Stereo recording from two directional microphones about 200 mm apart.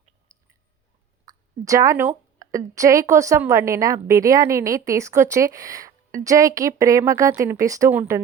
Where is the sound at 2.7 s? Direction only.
15° right (ahead or behind).